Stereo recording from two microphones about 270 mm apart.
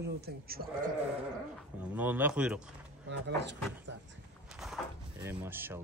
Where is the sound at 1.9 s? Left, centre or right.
Centre.